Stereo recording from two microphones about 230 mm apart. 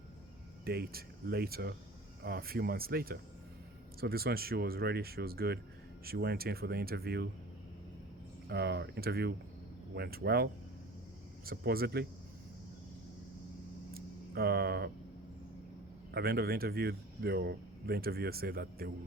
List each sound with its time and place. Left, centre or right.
0.6 s speech: right
8.4 s speech: right
13.9 s a sound: right
16.1 s speech: right